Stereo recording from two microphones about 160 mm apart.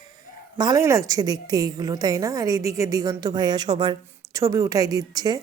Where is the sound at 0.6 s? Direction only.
20° right (ahead or behind).